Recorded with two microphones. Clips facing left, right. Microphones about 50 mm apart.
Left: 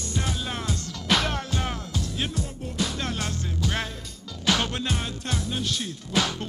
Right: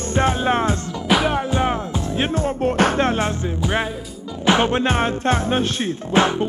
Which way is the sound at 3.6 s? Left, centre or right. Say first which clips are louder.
Right 6 dB; right.